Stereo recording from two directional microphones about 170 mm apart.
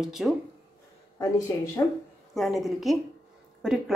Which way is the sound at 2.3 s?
Centre (ahead or behind).